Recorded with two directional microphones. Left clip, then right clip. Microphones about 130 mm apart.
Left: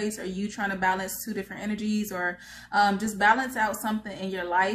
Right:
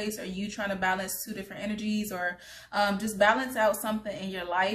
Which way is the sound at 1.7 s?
15° right (ahead or behind).